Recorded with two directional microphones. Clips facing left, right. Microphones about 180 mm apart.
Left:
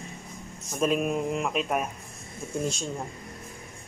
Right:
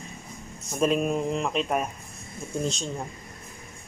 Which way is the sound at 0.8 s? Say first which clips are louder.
Right 2 dB; 5° left (ahead or behind).